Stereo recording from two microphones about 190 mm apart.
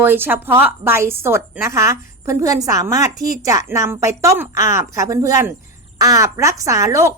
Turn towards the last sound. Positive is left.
turn(degrees=-15)  # may be behind; listen again after turning